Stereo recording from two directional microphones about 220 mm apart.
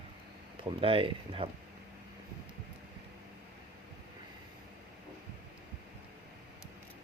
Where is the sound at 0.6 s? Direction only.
25° right (ahead or behind).